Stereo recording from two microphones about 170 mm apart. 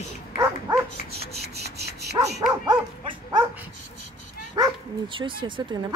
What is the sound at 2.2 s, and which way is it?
Speech, 25° right (ahead or behind).